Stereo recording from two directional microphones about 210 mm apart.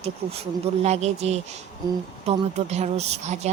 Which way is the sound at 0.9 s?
30° right (ahead or behind).